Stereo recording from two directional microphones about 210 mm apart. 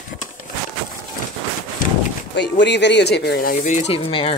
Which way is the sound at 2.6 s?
55° left (ahead or behind).